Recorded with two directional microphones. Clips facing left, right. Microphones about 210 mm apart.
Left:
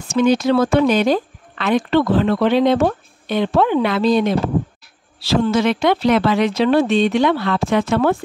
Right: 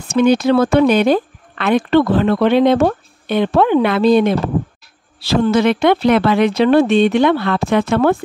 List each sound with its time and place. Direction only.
0.1 s speech: 60° right (ahead or behind)